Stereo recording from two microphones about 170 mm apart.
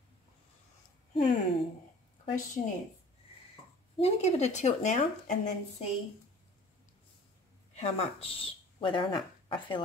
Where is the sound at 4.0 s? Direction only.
40° left (ahead or behind).